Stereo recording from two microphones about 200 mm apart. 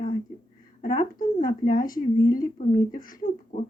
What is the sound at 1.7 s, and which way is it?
Speech, 45° left (ahead or behind).